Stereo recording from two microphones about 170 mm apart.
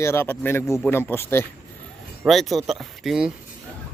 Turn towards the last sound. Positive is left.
turn(degrees=-5)  # may be behind; listen again after turning